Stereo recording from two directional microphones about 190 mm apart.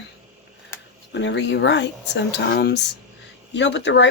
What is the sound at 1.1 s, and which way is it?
Speech, 70° left (ahead or behind).